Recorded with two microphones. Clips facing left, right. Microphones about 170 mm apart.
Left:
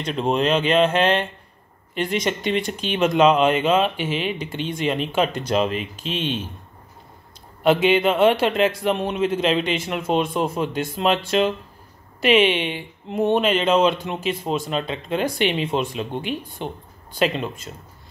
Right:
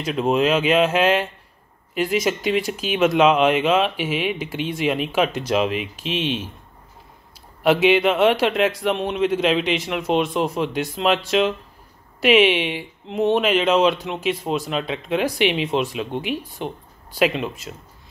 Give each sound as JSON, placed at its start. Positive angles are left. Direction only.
{"t": 0.0, "sound": "speech", "side_deg": -5}
{"t": 7.6, "sound": "speech", "side_deg": -5}